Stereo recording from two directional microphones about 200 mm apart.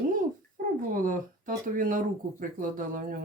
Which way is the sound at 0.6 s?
45° right (ahead or behind).